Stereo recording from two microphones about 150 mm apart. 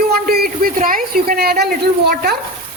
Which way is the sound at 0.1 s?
85° right.